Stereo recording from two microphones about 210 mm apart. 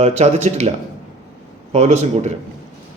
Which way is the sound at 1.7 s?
30° right (ahead or behind).